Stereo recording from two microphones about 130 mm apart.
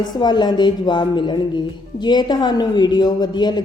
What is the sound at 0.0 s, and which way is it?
Speech, 35° left (ahead or behind).